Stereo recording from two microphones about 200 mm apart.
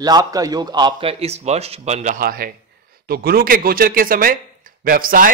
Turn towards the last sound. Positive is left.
turn(degrees=-45)  # may be behind; listen again after turning